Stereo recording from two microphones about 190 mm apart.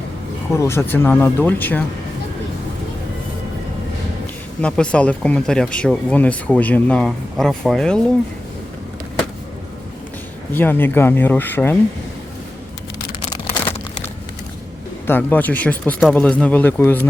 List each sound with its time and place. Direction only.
0.5 s speech: 15° left (ahead or behind)
4.6 s speech: 5° left (ahead or behind)
10.5 s speech: 10° left (ahead or behind)
13.3 s a sound: 20° left (ahead or behind)
15.0 s speech: 10° left (ahead or behind)